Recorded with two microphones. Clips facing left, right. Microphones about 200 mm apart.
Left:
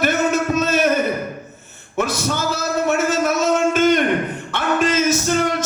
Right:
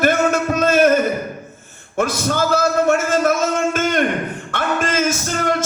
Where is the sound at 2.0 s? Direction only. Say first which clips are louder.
Right 2 dB; 50° right (ahead or behind).